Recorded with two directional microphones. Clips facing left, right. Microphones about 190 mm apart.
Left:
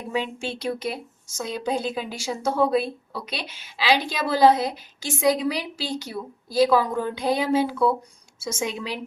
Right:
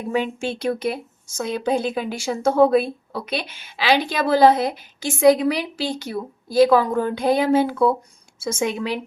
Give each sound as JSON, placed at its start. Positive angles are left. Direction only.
{"t": 0.1, "sound": "a woman's voice", "side_deg": -50}